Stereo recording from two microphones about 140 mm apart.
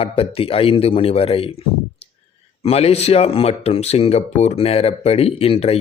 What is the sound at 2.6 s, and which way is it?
A man's voice, 45° left (ahead or behind).